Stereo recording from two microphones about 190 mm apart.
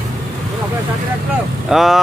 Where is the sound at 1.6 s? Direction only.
Centre (ahead or behind).